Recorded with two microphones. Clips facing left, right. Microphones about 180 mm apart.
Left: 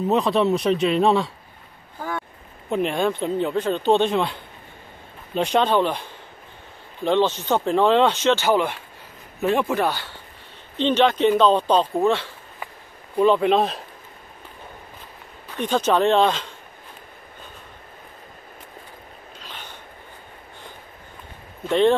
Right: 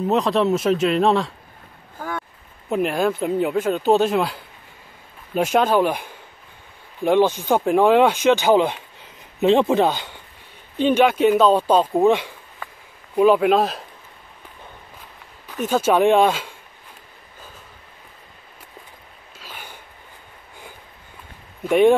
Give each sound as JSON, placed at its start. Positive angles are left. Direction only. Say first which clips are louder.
{"t": 0.0, "sound": "speech", "louder": "right 1 dB", "side_deg": 0}
{"t": 2.0, "sound": "a sound", "louder": "even", "side_deg": 0}
{"t": 2.7, "sound": "speech", "louder": "right 2 dB", "side_deg": -5}
{"t": 15.5, "sound": "speech", "louder": "right 2 dB", "side_deg": -5}
{"t": 19.4, "sound": "a sound", "louder": "right 2 dB", "side_deg": -10}
{"t": 21.6, "sound": "speech", "louder": "right 3 dB", "side_deg": -10}